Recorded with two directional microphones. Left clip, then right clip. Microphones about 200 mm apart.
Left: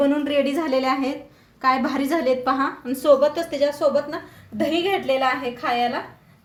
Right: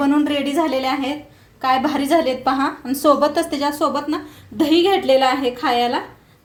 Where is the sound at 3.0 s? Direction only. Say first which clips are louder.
Right 1 dB; 45° right (ahead or behind).